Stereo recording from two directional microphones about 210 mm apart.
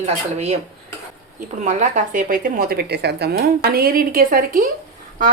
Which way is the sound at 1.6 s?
35° right (ahead or behind).